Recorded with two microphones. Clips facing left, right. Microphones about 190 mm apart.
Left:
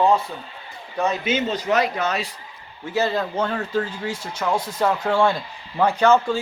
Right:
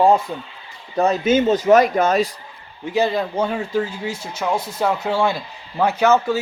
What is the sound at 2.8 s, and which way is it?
Speech, 15° right (ahead or behind).